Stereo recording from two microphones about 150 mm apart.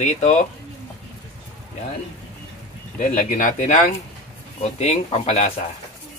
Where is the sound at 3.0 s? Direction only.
60° left (ahead or behind).